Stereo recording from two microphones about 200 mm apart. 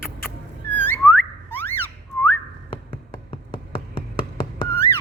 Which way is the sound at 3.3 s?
25° left (ahead or behind).